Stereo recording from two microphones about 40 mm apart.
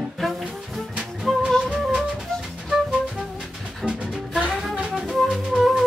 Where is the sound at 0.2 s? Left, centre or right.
Centre.